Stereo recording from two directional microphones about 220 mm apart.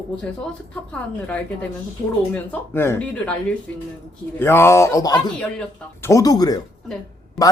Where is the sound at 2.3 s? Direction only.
10° left (ahead or behind).